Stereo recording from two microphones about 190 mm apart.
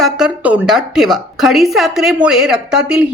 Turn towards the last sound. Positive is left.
turn(degrees=-5)  # may be behind; listen again after turning